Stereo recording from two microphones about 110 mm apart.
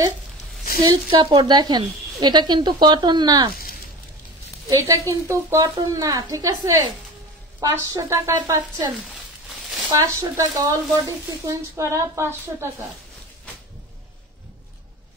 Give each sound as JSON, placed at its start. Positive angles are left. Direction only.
{"t": 1.1, "sound": "speech", "side_deg": -55}
{"t": 1.4, "sound": "speech", "side_deg": -40}
{"t": 4.6, "sound": "speech", "side_deg": -30}
{"t": 9.9, "sound": "speech", "side_deg": -30}